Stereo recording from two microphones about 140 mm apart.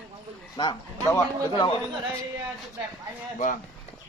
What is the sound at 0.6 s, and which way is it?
Speech, 35° left (ahead or behind).